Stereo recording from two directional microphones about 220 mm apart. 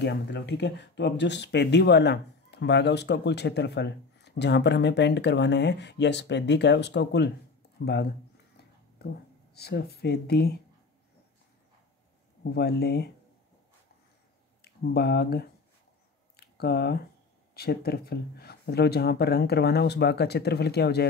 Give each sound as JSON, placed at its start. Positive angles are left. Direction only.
{"t": 0.0, "sound": "speech", "side_deg": 50}
{"t": 12.5, "sound": "speech", "side_deg": 45}
{"t": 14.6, "sound": "speech", "side_deg": 45}
{"t": 16.3, "sound": "a sound", "side_deg": 45}
{"t": 17.6, "sound": "speech", "side_deg": 45}